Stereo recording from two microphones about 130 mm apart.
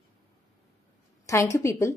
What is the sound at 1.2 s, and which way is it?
Speech, 20° left (ahead or behind).